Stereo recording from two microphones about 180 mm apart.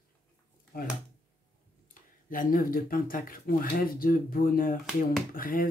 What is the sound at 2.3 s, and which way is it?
Speech, 50° left (ahead or behind).